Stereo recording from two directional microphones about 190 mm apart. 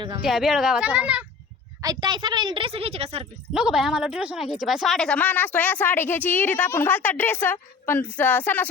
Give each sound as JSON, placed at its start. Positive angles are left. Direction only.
{"t": 0.3, "sound": "speech", "side_deg": 0}
{"t": 1.8, "sound": "a woman's voice", "side_deg": -20}
{"t": 3.5, "sound": "speech", "side_deg": -5}